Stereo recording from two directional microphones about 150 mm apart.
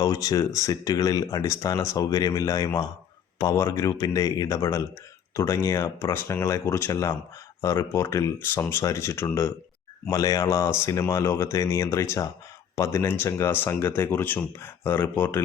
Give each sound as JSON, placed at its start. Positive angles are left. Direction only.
{"t": 0.0, "sound": "speech", "side_deg": 25}